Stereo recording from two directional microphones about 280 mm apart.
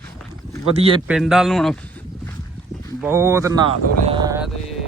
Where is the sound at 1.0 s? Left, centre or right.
Centre.